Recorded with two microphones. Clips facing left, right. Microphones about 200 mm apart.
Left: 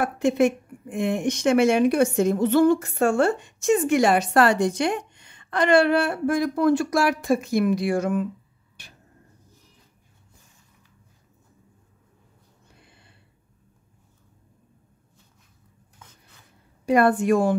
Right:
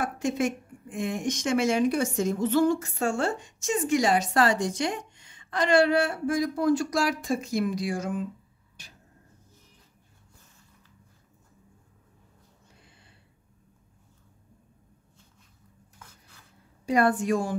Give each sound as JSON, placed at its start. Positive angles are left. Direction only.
{"t": 0.0, "sound": "speech", "side_deg": 60}
{"t": 12.8, "sound": "a sound", "side_deg": 60}
{"t": 16.8, "sound": "speech", "side_deg": 60}